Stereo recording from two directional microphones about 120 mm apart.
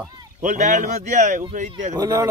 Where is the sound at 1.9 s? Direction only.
30° right (ahead or behind).